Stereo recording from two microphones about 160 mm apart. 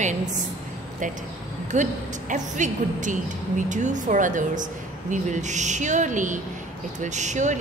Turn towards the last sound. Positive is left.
turn(degrees=-50)  # may be behind; listen again after turning